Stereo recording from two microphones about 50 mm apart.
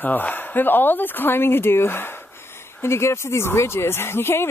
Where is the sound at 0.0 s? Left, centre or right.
Left.